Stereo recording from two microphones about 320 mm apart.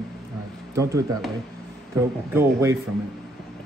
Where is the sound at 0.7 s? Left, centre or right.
Centre.